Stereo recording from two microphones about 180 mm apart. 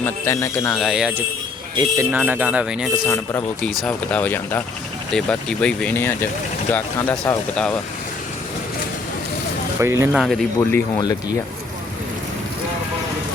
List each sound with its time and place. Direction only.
0.0 s speech: 15° left (ahead or behind)
0.8 s speech: centre (ahead or behind)
1.7 s speech: 20° right (ahead or behind)
2.1 s speech: 10° right (ahead or behind); by 7.8 s 5° left (ahead or behind)
9.8 s speech: 15° right (ahead or behind)
10.1 s speech: centre (ahead or behind)
10.6 s speech: 15° left (ahead or behind)